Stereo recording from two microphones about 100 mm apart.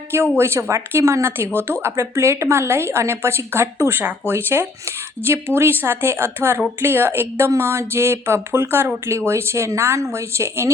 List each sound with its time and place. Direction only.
0.3 s speech: 25° right (ahead or behind)